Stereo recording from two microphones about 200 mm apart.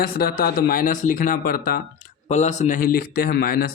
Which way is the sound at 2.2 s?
35° left (ahead or behind).